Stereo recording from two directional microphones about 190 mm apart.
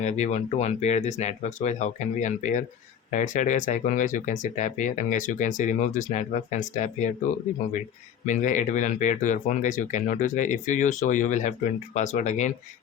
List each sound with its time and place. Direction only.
0.0 s speech: 35° left (ahead or behind)
8.3 s speech: 40° left (ahead or behind)